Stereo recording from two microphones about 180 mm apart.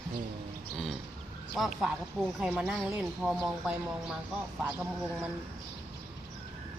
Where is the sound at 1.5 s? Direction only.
Centre (ahead or behind).